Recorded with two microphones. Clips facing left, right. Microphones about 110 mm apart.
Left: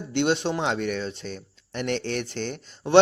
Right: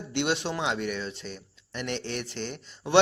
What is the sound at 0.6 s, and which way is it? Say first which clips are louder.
Speech: left 3 dB; 40° left (ahead or behind).